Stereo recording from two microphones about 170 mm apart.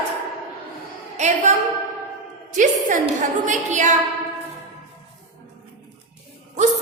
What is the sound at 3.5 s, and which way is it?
Speech, 45° right (ahead or behind).